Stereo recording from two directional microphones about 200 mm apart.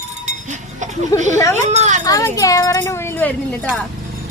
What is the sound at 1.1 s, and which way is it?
Speech, 15° left (ahead or behind).